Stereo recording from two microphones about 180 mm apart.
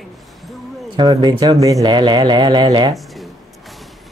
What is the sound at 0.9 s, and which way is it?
Speech, 20° right (ahead or behind).